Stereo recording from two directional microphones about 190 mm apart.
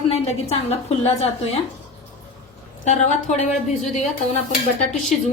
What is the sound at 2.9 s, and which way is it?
Speech, 40° left (ahead or behind).